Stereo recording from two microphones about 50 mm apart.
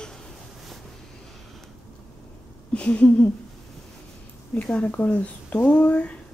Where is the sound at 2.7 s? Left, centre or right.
Left.